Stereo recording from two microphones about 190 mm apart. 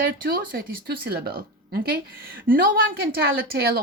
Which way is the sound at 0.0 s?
50° right (ahead or behind).